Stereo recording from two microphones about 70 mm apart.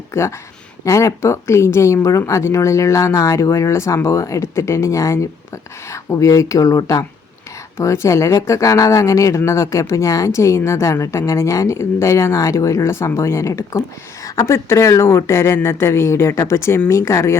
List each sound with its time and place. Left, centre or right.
0.1 s speech: left
7.8 s a woman's voice: left